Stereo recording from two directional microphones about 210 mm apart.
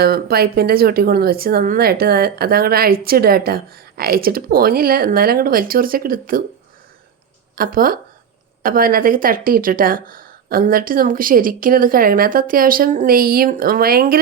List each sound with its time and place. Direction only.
0.0 s speech: 45° right (ahead or behind)
7.5 s speech: 40° right (ahead or behind)